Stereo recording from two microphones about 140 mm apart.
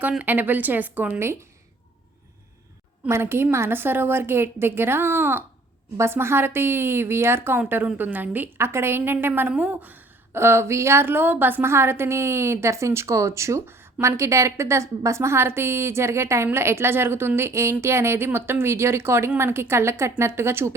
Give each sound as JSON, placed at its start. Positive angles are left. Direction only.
{"t": 0.1, "sound": "speech", "side_deg": -10}
{"t": 3.1, "sound": "speech", "side_deg": -15}